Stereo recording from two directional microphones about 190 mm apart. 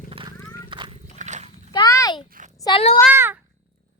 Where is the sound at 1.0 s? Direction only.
40° right (ahead or behind).